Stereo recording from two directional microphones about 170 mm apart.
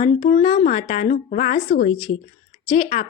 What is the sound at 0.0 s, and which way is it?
A woman's voice, 40° left (ahead or behind).